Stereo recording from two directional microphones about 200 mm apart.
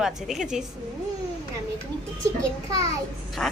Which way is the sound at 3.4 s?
5° left (ahead or behind).